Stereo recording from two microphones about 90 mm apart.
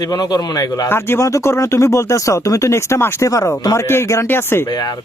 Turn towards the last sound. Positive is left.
turn(degrees=25)  # may be behind; listen again after turning